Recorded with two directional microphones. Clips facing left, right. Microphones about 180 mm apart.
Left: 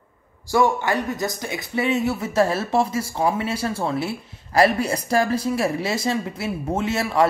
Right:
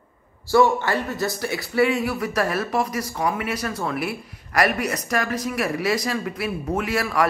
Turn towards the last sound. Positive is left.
turn(degrees=25)  # may be behind; listen again after turning